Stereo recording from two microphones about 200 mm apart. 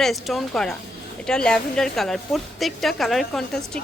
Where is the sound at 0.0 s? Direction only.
Centre (ahead or behind).